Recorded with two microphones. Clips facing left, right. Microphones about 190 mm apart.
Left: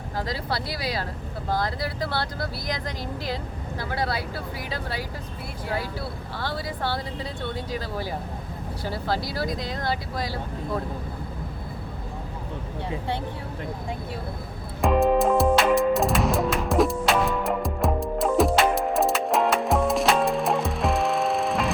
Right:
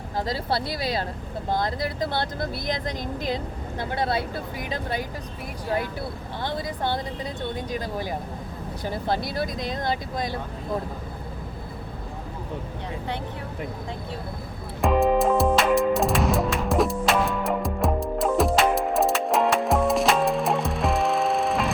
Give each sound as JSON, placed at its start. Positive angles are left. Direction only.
{"t": 0.2, "sound": "speech", "side_deg": -25}
{"t": 6.4, "sound": "speech", "side_deg": -20}
{"t": 14.8, "sound": "music", "side_deg": 0}